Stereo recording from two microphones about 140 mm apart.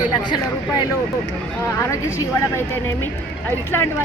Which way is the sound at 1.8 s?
20° left (ahead or behind).